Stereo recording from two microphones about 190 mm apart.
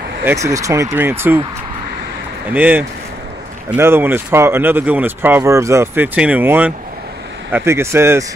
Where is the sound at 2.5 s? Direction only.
10° right (ahead or behind).